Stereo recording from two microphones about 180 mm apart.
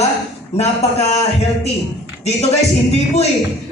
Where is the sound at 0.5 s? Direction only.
35° left (ahead or behind).